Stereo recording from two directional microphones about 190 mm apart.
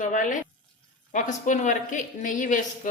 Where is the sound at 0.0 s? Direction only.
40° left (ahead or behind).